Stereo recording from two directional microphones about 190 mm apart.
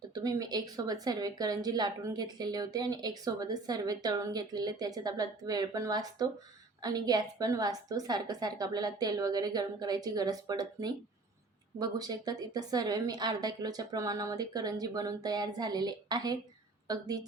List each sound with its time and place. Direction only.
0.1 s a woman's voice: 20° right (ahead or behind)